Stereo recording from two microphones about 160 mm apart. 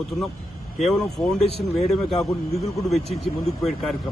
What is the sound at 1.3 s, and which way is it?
Speech, 40° left (ahead or behind).